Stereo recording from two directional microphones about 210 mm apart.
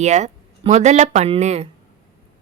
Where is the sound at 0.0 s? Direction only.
35° right (ahead or behind).